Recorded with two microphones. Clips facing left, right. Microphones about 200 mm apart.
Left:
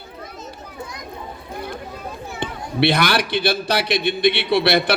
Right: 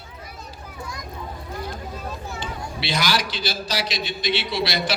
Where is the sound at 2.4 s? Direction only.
60° left (ahead or behind).